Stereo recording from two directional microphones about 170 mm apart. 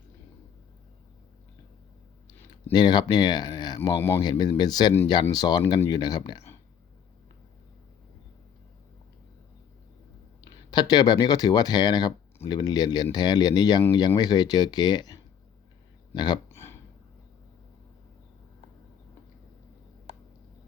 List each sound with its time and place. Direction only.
2.7 s speech: 25° left (ahead or behind)
10.4 s speech: 25° left (ahead or behind)
16.1 s a sound: 25° left (ahead or behind)